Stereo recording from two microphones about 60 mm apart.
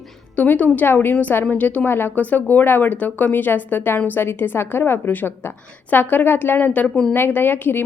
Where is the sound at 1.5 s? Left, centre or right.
Left.